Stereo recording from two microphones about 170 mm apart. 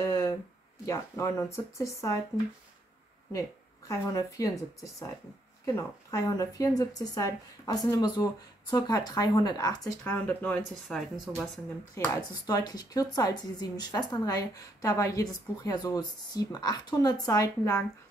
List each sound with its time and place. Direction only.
0.0 s a sound: 20° left (ahead or behind)
0.8 s speech: 20° left (ahead or behind)
5.8 s speech: 20° left (ahead or behind)
11.9 s speech: 20° left (ahead or behind)